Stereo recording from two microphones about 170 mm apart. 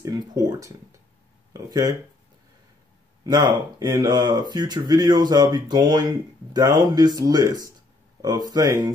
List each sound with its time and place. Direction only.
0.0 s speech: 20° right (ahead or behind)
3.3 s speech: 25° right (ahead or behind)